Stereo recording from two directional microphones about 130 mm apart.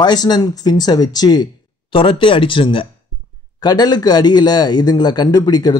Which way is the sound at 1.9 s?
40° left (ahead or behind).